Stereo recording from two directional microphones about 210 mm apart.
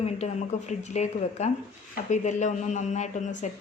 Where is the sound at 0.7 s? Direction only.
35° left (ahead or behind).